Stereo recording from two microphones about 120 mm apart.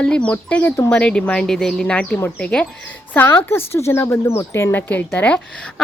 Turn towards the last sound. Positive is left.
turn(degrees=10)  # may be behind; listen again after turning